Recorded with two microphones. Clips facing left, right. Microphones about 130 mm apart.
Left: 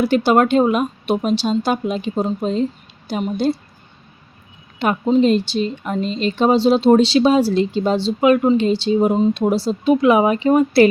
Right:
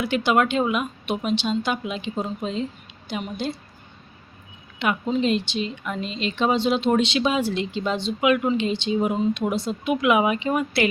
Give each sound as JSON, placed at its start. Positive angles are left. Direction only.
{"t": 0.0, "sound": "speech", "side_deg": 35}
{"t": 4.8, "sound": "speech", "side_deg": 35}